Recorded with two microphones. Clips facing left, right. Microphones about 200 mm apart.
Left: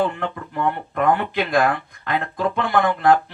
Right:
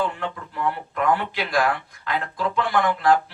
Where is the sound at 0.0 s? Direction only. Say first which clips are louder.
Left 4 dB; 50° left (ahead or behind).